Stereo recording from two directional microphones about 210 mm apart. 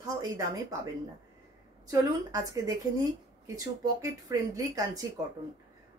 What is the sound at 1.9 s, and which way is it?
Speech, 15° right (ahead or behind).